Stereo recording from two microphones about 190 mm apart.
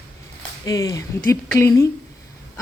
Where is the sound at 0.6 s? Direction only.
20° left (ahead or behind).